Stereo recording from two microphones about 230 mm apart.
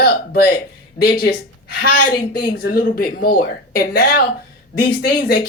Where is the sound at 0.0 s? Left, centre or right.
Left.